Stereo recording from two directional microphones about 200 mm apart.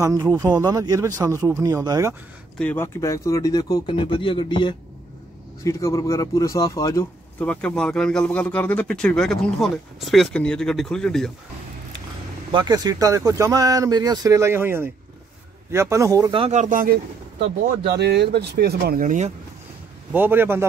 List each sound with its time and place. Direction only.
0.0 s speech: 15° right (ahead or behind)
2.6 s speech: 10° left (ahead or behind)
12.5 s speech: 20° right (ahead or behind); by 17.0 s 45° right (ahead or behind)
17.4 s speech: 60° right (ahead or behind); by 19.3 s 40° right (ahead or behind)
20.1 s speech: 10° right (ahead or behind)